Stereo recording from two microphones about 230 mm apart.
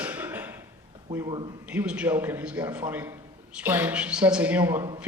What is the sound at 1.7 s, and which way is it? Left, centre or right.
A man's voice, centre.